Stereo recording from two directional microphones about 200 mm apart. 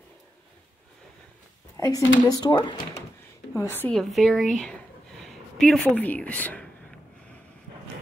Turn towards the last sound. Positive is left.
turn(degrees=5)  # may be behind; listen again after turning